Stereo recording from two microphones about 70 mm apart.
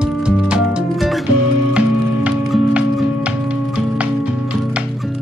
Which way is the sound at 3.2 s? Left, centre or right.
Centre.